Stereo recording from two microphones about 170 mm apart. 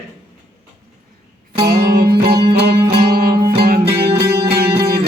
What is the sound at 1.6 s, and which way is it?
Music, 70° right (ahead or behind).